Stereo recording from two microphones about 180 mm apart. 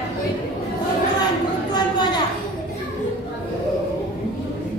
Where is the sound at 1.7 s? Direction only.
25° left (ahead or behind).